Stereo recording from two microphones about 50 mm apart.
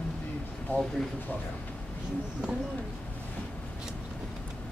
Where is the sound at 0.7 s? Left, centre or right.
Left.